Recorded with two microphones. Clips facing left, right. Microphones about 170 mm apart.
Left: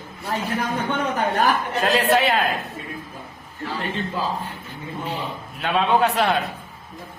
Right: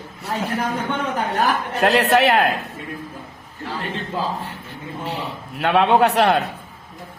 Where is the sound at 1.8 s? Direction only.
70° right (ahead or behind).